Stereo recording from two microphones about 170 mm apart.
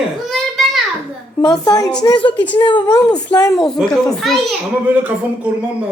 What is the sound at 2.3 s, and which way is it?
Speech, 10° left (ahead or behind).